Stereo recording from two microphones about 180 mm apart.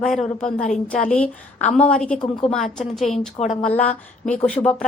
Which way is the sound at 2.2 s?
25° left (ahead or behind).